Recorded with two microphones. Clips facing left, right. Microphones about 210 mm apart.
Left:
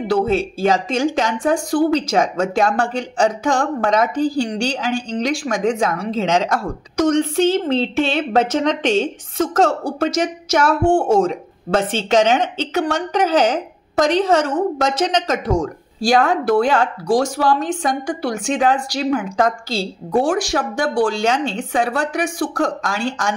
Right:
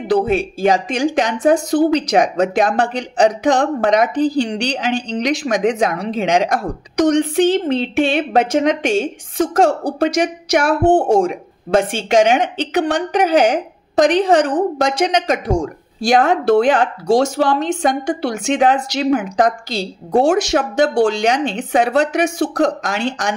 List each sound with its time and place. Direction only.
0.1 s a woman's voice: 15° right (ahead or behind)